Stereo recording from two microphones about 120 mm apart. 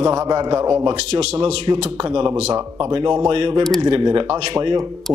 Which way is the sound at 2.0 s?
40° right (ahead or behind).